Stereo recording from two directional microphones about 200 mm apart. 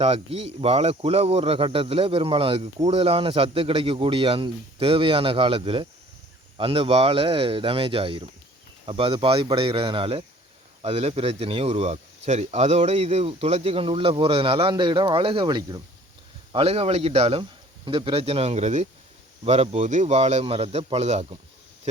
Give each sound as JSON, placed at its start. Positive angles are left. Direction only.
{"t": 0.0, "sound": "a man's voice", "side_deg": -30}